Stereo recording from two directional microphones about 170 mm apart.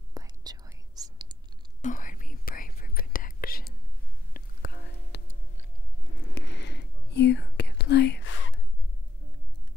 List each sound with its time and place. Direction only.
0.1 s whispering: 20° right (ahead or behind)
1.8 s whispering: 50° left (ahead or behind); by 5.4 s 75° left (ahead or behind)
6.3 s whispering: 90° left